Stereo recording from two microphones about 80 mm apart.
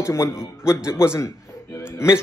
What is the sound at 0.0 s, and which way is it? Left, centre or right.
Speech, left.